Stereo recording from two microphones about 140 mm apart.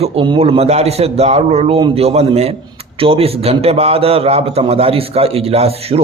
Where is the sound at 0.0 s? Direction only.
45° right (ahead or behind).